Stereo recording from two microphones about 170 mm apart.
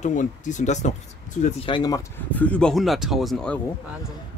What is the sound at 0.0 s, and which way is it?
Speech, 45° left (ahead or behind).